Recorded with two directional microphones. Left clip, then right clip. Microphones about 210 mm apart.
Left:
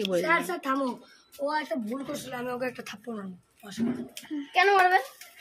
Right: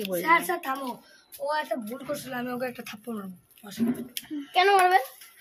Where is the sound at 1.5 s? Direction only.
5° right (ahead or behind).